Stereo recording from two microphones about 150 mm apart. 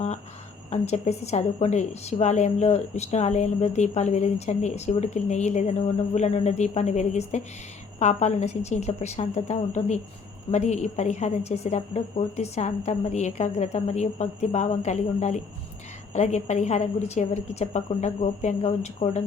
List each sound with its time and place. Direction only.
0.7 s a woman's voice: 45° left (ahead or behind)